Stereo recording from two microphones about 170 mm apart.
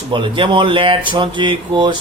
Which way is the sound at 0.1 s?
30° right (ahead or behind).